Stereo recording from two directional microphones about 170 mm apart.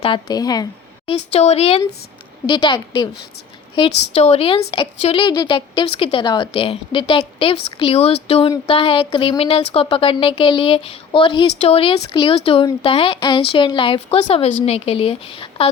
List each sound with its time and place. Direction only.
0.0 s speech: 25° left (ahead or behind)
1.0 s a woman's voice: 40° left (ahead or behind)